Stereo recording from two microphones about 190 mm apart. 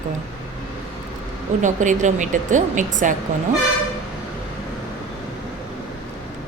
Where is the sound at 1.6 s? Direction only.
40° right (ahead or behind).